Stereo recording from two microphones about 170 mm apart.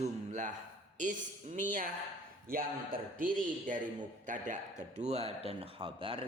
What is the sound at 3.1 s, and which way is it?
A man's voice, 55° right (ahead or behind).